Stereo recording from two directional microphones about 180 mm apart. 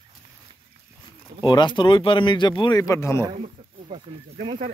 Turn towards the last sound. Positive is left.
turn(degrees=-40)  # may be behind; listen again after turning